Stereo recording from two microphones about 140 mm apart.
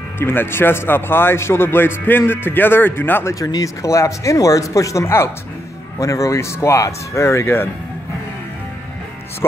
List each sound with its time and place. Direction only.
0.2 s a man's voice: 15° left (ahead or behind)